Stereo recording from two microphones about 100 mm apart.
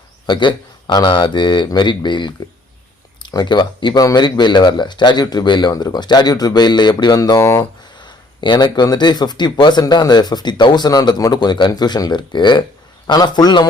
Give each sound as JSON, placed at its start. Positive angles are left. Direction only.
{"t": 0.3, "sound": "speech", "side_deg": 50}
{"t": 7.6, "sound": "speech", "side_deg": 50}